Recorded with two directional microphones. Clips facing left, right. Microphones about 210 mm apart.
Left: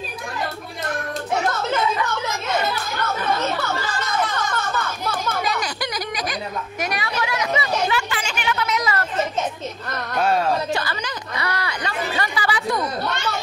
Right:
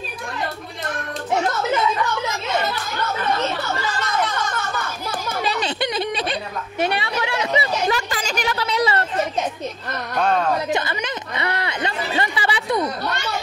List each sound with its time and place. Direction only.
5.4 s a sound: 30° right (ahead or behind)
10.1 s speech: 5° left (ahead or behind)
10.7 s chatter: 20° right (ahead or behind)